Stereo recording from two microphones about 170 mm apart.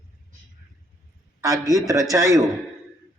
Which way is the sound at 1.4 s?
20° right (ahead or behind).